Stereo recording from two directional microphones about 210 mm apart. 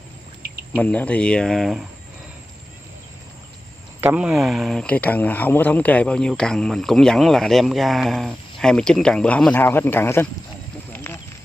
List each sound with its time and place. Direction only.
0.7 s speech: 5° left (ahead or behind)
4.0 s speech: 5° right (ahead or behind); by 10.2 s 10° left (ahead or behind)
11.1 s a sound: 10° left (ahead or behind)